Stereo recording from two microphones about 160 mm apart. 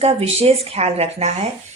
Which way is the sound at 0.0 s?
40° right (ahead or behind).